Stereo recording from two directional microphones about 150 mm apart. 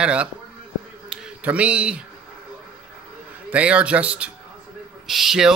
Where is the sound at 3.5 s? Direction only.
10° right (ahead or behind).